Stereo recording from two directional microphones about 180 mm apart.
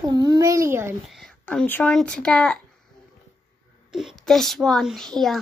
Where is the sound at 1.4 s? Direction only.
5° left (ahead or behind).